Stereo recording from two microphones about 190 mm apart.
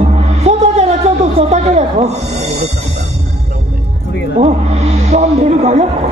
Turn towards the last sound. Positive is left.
turn(degrees=-35)  # may be behind; listen again after turning